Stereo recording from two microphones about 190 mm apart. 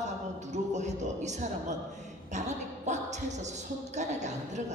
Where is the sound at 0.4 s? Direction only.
40° right (ahead or behind).